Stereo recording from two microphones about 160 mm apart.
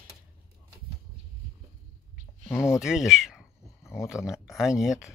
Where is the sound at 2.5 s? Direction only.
15° left (ahead or behind).